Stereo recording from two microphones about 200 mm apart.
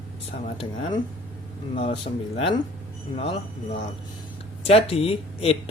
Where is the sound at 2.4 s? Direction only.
25° left (ahead or behind).